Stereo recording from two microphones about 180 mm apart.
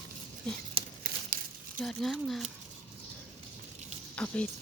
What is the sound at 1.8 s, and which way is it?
Speech, centre (ahead or behind).